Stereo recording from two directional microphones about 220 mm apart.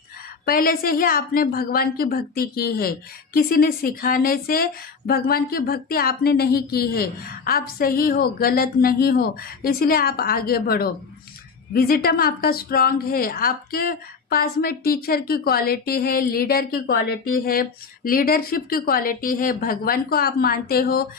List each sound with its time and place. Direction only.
0.4 s a woman's voice: 40° left (ahead or behind)